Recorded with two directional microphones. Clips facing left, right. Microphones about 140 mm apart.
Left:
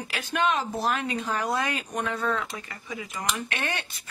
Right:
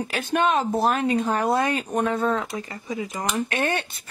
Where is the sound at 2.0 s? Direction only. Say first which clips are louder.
Right 5 dB; 45° right (ahead or behind).